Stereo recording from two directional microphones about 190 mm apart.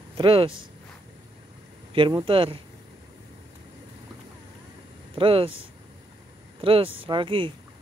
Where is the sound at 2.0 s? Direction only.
25° right (ahead or behind).